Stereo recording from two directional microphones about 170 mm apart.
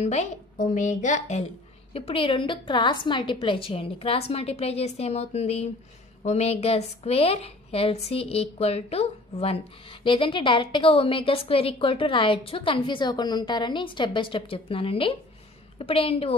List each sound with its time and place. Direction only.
0.0 s a woman's voice: 40° left (ahead or behind)
2.0 s a woman's voice: 35° left (ahead or behind)